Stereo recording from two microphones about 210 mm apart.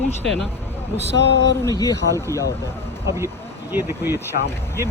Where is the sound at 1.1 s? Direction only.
55° left (ahead or behind).